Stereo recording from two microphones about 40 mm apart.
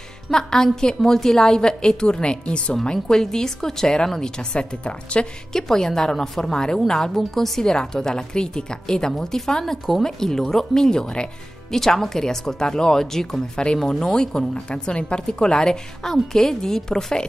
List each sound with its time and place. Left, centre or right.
0.3 s a woman's voice: centre
5.5 s a woman's voice: centre